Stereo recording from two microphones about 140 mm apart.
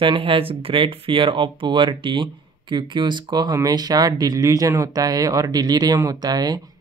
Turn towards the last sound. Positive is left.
turn(degrees=-30)  # may be behind; listen again after turning